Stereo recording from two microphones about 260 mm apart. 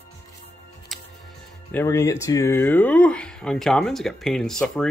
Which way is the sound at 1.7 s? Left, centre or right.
Centre.